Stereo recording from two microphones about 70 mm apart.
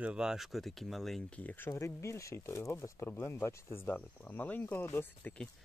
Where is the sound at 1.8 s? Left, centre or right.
Left.